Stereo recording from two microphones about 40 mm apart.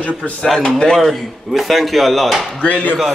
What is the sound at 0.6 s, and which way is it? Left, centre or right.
Speech, centre.